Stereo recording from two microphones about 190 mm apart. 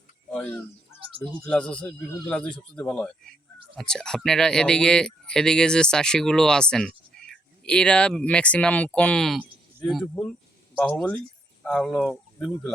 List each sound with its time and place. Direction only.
1.0 s speech: 25° right (ahead or behind)
1.5 s speech: 5° left (ahead or behind)
11.6 s speech: 5° left (ahead or behind)